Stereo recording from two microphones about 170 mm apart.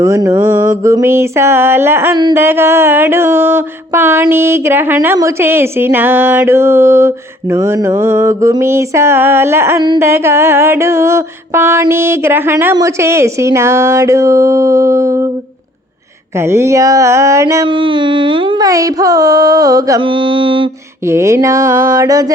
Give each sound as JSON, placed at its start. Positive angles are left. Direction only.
{"t": 0.0, "sound": "music", "side_deg": -15}
{"t": 16.5, "sound": "music", "side_deg": -15}
{"t": 17.7, "sound": "carnatic music", "side_deg": -30}
{"t": 21.1, "sound": "music", "side_deg": -15}